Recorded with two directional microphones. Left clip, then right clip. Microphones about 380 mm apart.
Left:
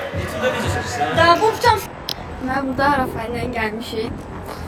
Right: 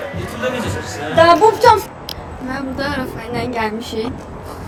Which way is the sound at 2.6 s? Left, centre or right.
Centre.